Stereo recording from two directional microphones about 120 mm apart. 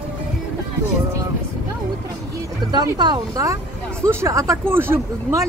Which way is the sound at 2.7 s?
35° right (ahead or behind).